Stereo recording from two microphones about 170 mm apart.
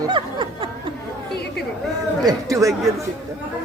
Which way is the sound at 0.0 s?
30° right (ahead or behind).